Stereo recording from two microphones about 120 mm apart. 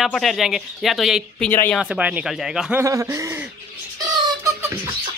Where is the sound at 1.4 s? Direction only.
15° left (ahead or behind).